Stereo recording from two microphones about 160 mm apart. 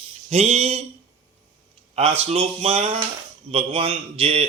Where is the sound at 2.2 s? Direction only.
40° right (ahead or behind).